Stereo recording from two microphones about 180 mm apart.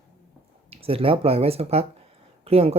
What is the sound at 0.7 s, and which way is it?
Speech, 30° right (ahead or behind).